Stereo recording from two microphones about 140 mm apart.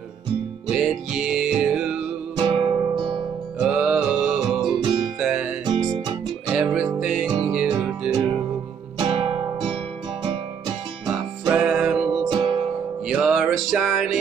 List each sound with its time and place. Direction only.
0.7 s music: 5° right (ahead or behind)
2.3 s music: 35° right (ahead or behind)
3.5 s music: 5° right (ahead or behind)
8.9 s music: 40° right (ahead or behind)
11.1 s music: 5° right (ahead or behind)
12.2 s music: 35° right (ahead or behind)
13.1 s music: 5° right (ahead or behind)